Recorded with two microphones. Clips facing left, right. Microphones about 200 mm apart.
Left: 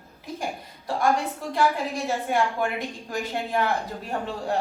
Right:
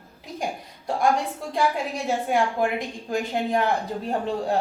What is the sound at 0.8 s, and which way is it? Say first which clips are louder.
A woman's voice: right 1 dB; 15° right (ahead or behind).